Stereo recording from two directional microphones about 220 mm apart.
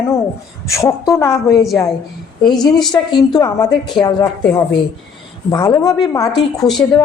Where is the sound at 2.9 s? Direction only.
20° left (ahead or behind).